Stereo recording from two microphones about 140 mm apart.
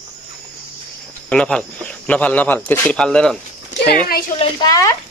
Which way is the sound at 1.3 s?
5° left (ahead or behind).